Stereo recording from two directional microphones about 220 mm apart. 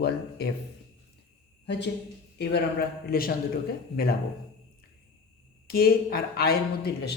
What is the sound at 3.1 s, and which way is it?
Speech, 40° left (ahead or behind).